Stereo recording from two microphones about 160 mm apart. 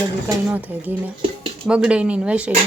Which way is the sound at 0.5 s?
10° right (ahead or behind).